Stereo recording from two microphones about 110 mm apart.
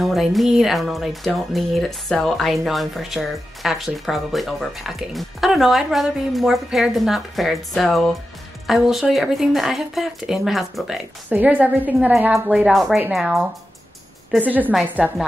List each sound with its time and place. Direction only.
0.0 s speech: centre (ahead or behind)
11.2 s a woman's voice: 15° right (ahead or behind)
12.3 s speech: 5° right (ahead or behind)
14.4 s a woman's voice: 15° right (ahead or behind)